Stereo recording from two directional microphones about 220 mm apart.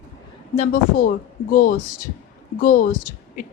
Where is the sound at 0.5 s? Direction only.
35° left (ahead or behind).